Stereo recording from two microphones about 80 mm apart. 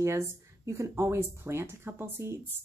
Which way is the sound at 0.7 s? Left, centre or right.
Right.